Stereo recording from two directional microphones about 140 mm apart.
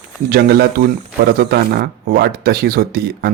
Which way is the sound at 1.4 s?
90° right.